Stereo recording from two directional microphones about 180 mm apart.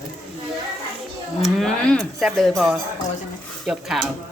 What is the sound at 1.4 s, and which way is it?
Speech, centre (ahead or behind).